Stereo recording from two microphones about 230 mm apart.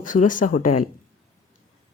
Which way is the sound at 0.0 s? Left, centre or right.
Left.